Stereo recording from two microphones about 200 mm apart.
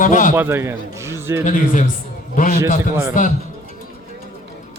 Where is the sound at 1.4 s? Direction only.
40° left (ahead or behind).